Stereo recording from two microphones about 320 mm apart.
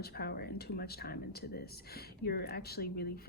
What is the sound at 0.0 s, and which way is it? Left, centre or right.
Speech, left.